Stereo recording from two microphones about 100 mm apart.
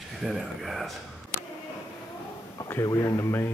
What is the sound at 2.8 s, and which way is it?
Speech, 35° left (ahead or behind).